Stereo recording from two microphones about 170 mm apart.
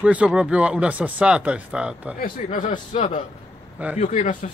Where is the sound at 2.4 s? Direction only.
50° left (ahead or behind).